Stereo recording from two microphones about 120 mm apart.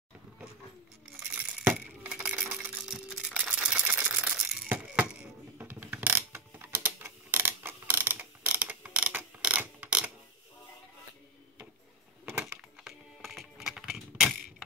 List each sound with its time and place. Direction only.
2.0 s a sound: 10° right (ahead or behind)
5.6 s mechanisms: 15° right (ahead or behind)
12.4 s computer keyboard: 5° right (ahead or behind)